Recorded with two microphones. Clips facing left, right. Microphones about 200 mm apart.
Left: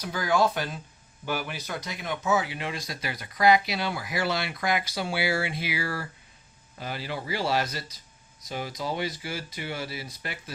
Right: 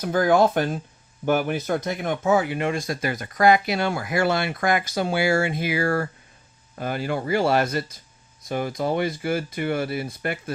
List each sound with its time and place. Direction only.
0.0 s speech: 50° right (ahead or behind)